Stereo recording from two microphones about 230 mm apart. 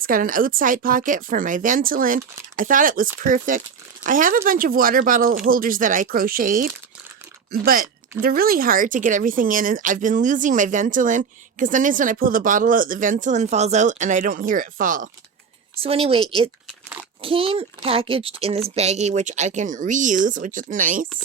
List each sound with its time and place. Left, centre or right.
0.0 s speech: right
15.8 s a child's voice: right